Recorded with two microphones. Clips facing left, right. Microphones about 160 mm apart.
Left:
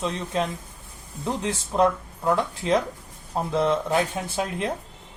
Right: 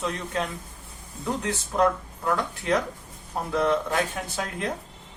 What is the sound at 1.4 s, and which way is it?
Speech, 25° left (ahead or behind).